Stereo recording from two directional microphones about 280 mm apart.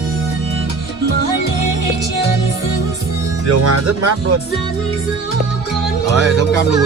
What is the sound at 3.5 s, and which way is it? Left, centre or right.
Speech, right.